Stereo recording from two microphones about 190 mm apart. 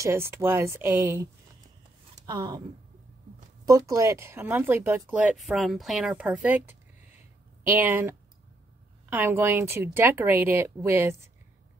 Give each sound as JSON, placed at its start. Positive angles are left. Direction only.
{"t": 0.0, "sound": "speech", "side_deg": -15}
{"t": 3.6, "sound": "speech", "side_deg": -15}